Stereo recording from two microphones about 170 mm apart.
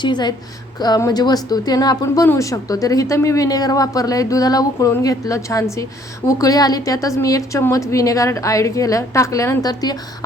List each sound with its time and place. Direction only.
0.0 s speech: 25° left (ahead or behind)